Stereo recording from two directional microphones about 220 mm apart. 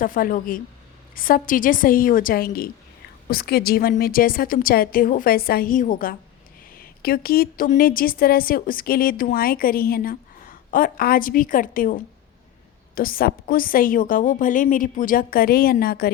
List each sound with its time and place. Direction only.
0.0 s a woman's voice: 40° left (ahead or behind)